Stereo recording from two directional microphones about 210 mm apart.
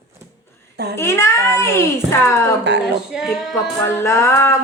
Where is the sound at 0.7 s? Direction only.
50° right (ahead or behind).